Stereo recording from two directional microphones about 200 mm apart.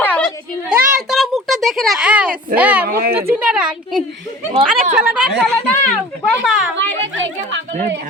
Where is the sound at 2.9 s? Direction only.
50° right (ahead or behind).